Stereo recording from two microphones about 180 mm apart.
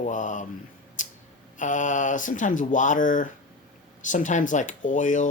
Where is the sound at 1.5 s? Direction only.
45° left (ahead or behind).